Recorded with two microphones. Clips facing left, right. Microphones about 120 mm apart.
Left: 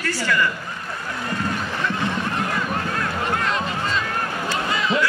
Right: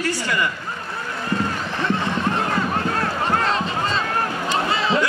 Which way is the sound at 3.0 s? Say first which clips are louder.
Right 3 dB; 30° right (ahead or behind).